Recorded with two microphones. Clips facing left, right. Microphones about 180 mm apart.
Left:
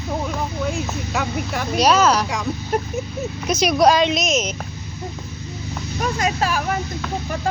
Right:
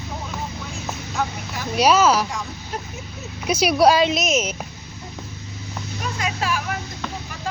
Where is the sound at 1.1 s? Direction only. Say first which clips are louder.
Left 1 dB; 70° left (ahead or behind).